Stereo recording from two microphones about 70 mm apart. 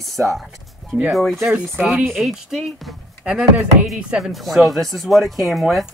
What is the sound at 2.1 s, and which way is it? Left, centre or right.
Speech, centre.